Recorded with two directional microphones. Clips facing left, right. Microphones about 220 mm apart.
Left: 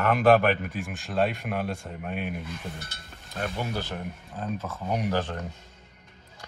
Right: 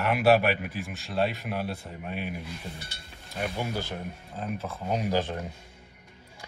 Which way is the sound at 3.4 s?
10° right (ahead or behind).